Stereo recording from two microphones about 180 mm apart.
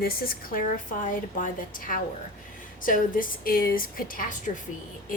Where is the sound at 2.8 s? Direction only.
50° left (ahead or behind).